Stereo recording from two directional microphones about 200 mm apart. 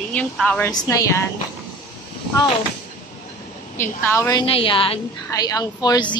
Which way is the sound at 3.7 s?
10° left (ahead or behind).